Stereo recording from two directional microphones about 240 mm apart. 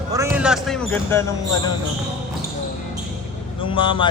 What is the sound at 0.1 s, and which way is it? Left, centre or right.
Speech, centre.